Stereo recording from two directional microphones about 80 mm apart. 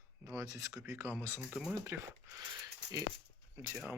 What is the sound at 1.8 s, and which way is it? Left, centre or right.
Speech, right.